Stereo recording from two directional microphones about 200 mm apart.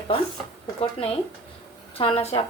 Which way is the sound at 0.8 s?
30° left (ahead or behind).